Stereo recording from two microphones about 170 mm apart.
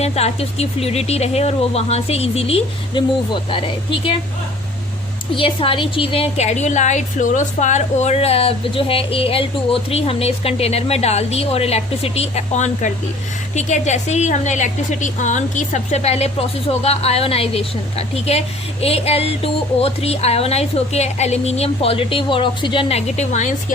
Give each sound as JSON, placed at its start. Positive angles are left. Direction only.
{"t": 0.0, "sound": "a woman's voice", "side_deg": 40}
{"t": 5.3, "sound": "a woman's voice", "side_deg": 30}